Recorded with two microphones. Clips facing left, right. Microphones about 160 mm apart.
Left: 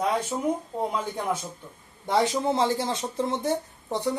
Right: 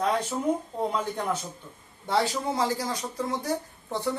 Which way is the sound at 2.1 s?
20° left (ahead or behind).